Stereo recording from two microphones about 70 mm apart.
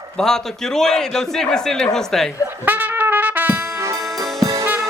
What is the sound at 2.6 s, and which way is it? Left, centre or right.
Trumpet, right.